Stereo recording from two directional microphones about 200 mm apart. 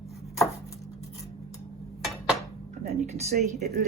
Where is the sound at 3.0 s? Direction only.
35° right (ahead or behind).